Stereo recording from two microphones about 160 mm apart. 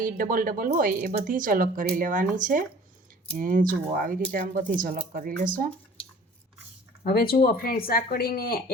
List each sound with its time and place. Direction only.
0.0 s speech: 60° right (ahead or behind)
7.0 s speech: 70° left (ahead or behind)